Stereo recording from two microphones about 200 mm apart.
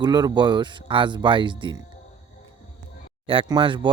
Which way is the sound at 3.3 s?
25° right (ahead or behind).